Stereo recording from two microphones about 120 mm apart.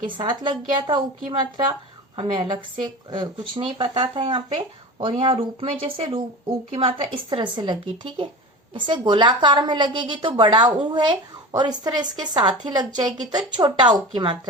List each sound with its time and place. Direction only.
0.0 s a woman's voice: 40° right (ahead or behind)